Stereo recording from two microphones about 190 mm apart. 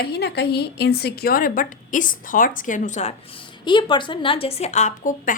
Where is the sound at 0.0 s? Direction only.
60° left (ahead or behind).